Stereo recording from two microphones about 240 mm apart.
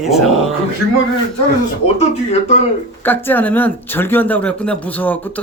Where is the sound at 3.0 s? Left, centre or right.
Centre.